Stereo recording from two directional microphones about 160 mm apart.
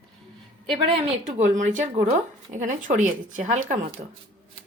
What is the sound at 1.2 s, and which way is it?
A woman's voice, 45° right (ahead or behind).